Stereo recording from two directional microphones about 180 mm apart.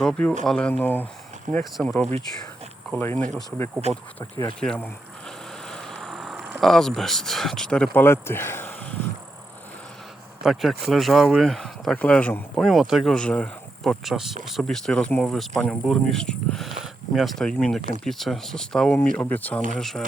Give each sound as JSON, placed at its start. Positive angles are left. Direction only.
{"t": 0.0, "sound": "speech", "side_deg": 5}
{"t": 4.6, "sound": "speech", "side_deg": 5}
{"t": 5.6, "sound": "a sound", "side_deg": 5}
{"t": 7.9, "sound": "speech", "side_deg": 15}
{"t": 10.4, "sound": "speech", "side_deg": 0}